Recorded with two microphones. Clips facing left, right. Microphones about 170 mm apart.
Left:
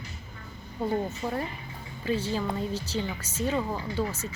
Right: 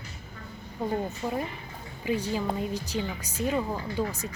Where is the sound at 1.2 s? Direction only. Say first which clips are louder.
Even; 10° right (ahead or behind).